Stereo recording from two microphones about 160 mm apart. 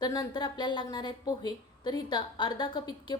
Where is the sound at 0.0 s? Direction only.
25° left (ahead or behind).